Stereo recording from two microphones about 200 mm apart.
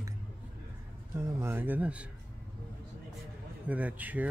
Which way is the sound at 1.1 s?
10° right (ahead or behind).